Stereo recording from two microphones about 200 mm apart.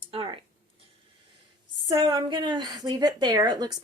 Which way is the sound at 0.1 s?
30° right (ahead or behind).